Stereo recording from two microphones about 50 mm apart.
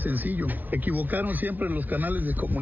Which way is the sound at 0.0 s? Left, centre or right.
Right.